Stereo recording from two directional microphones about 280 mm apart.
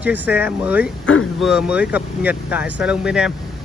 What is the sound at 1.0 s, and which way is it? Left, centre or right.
Speech, left.